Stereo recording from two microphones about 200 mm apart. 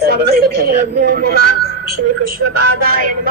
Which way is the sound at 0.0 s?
50° right (ahead or behind).